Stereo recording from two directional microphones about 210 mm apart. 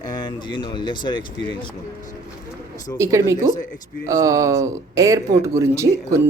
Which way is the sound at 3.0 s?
15° right (ahead or behind).